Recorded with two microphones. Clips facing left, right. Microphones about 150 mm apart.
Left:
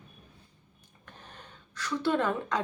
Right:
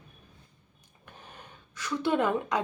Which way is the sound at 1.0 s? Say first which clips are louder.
Right 1 dB; 10° right (ahead or behind).